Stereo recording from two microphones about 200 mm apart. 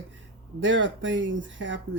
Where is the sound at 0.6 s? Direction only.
65° right (ahead or behind).